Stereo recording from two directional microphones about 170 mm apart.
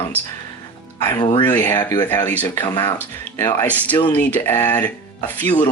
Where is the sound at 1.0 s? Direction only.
25° left (ahead or behind).